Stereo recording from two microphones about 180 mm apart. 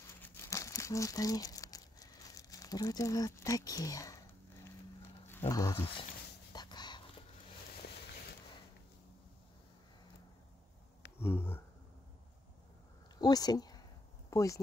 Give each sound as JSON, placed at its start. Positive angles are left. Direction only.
{"t": 0.2, "sound": "crumpling", "side_deg": 15}
{"t": 5.0, "sound": "a sound", "side_deg": 15}
{"t": 5.5, "sound": "speech", "side_deg": 15}
{"t": 6.5, "sound": "whispering", "side_deg": 25}
{"t": 11.1, "sound": "a sound", "side_deg": 10}
{"t": 13.2, "sound": "speech", "side_deg": 20}